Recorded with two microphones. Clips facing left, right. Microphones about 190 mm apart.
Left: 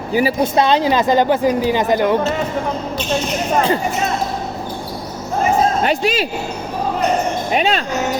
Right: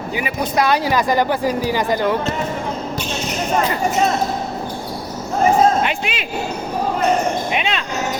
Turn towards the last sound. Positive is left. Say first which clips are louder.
# left 5 dB
turn(degrees=40)  # may be behind; listen again after turning